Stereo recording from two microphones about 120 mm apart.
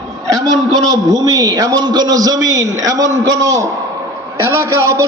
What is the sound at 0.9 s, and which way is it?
A man's voice, 30° right (ahead or behind).